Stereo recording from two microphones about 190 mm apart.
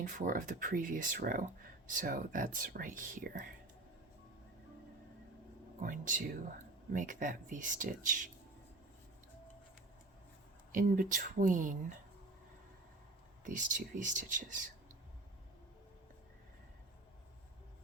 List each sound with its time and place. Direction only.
0.0 s speech: 45° right (ahead or behind)
5.8 s speech: 45° right (ahead or behind)
10.7 s speech: 45° right (ahead or behind)
13.4 s speech: 45° right (ahead or behind)